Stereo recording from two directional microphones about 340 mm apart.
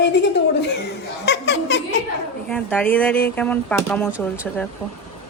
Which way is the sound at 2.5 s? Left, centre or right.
Centre.